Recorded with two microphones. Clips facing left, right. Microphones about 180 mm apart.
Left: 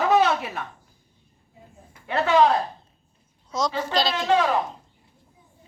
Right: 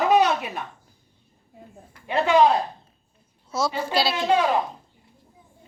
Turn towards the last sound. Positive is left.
turn(degrees=-15)  # may be behind; listen again after turning